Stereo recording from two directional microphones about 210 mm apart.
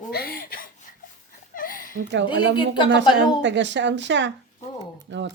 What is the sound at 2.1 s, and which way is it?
Speech, 55° right (ahead or behind).